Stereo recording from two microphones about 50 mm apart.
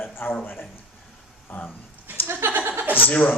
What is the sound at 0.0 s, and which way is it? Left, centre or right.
Speech, left.